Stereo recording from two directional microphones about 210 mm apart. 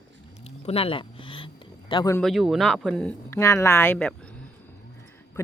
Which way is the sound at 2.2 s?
Centre (ahead or behind).